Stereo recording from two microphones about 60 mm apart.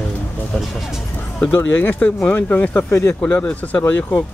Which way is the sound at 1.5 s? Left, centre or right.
Left.